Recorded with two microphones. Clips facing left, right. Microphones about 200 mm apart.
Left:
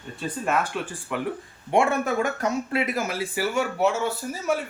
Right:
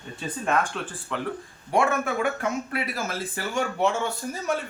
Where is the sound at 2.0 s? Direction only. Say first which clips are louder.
Left 1 dB; 40° left (ahead or behind).